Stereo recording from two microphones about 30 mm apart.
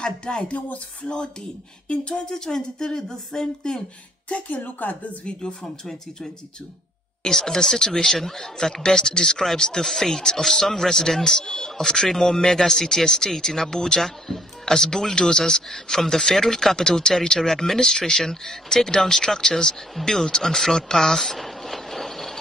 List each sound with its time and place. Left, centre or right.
0.0 s speech: left
1.0 s a sound: left
2.3 s speech: centre
4.3 s speech: left
4.8 s a woman's voice: left
5.2 s a sound: left
7.2 s a man's voice: centre
8.8 s speech: left
9.8 s a man's voice: centre
14.0 s a man's voice: centre
14.6 s a man's voice: centre
21.0 s a sound: centre